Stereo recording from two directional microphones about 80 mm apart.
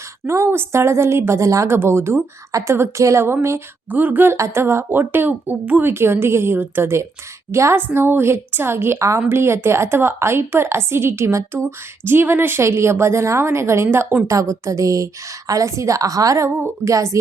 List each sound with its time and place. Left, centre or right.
0.3 s a woman's voice: right
2.5 s a woman's voice: right
3.8 s a woman's voice: right
4.4 s a woman's voice: right
14.3 s a woman's voice: right